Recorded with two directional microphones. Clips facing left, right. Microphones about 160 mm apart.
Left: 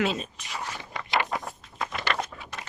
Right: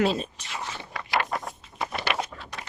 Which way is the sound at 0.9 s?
20° left (ahead or behind).